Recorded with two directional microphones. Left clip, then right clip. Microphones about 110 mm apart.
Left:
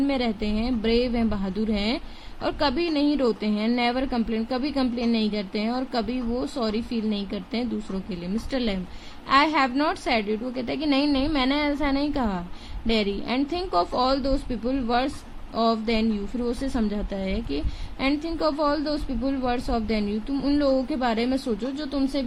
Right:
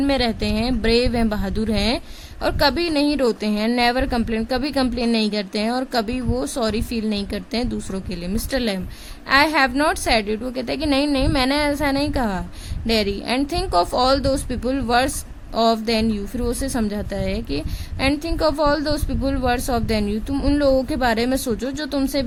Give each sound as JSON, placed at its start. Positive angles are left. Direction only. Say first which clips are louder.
{"t": 0.0, "sound": "speech", "louder": "right 5 dB", "side_deg": -80}
{"t": 8.5, "sound": "a woman's voice", "louder": "right 5 dB", "side_deg": -55}
{"t": 18.0, "sound": "speech", "louder": "right 5 dB", "side_deg": -65}